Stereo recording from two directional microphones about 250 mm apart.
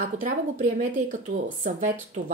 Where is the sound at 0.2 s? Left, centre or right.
Right.